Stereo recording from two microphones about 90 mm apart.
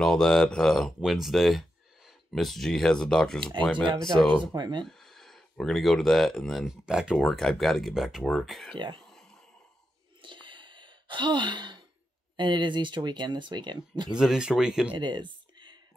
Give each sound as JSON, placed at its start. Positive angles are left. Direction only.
{"t": 0.0, "sound": "speech", "side_deg": 5}
{"t": 4.4, "sound": "speech", "side_deg": -55}
{"t": 4.8, "sound": "speech", "side_deg": 0}
{"t": 8.7, "sound": "speech", "side_deg": -60}
{"t": 9.0, "sound": "a sound", "side_deg": 5}
{"t": 10.2, "sound": "gasp", "side_deg": -65}
{"t": 12.4, "sound": "speech", "side_deg": -60}
{"t": 14.1, "sound": "speech", "side_deg": -10}
{"t": 15.0, "sound": "a sound", "side_deg": -60}